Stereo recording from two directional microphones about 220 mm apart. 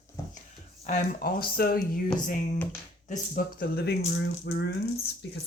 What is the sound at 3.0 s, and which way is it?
Speech, 40° left (ahead or behind).